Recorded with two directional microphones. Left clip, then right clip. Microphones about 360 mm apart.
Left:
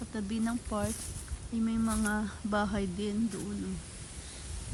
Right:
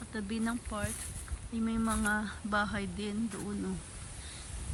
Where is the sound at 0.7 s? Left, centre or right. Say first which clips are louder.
Left 4 dB; centre.